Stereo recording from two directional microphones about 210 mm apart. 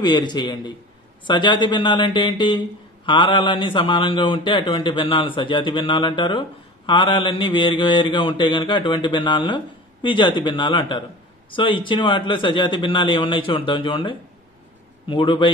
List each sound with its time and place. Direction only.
0.0 s a man's voice: 20° left (ahead or behind)